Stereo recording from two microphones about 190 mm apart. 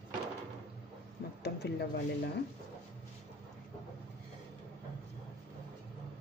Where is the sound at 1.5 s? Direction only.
60° left (ahead or behind).